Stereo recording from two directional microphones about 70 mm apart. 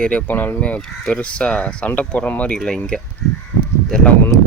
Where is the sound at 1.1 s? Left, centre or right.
Centre.